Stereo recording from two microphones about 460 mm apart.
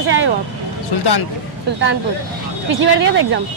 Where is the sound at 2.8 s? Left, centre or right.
Right.